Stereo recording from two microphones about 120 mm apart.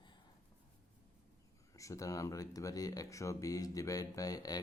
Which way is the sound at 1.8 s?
25° left (ahead or behind).